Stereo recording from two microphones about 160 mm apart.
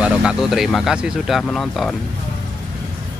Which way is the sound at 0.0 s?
5° right (ahead or behind).